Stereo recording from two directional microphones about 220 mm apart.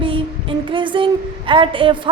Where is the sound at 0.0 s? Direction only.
25° right (ahead or behind).